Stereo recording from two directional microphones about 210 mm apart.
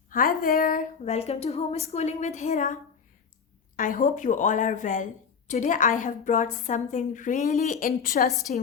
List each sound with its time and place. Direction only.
0.1 s a woman's voice: 40° left (ahead or behind)
3.8 s a woman's voice: 40° left (ahead or behind)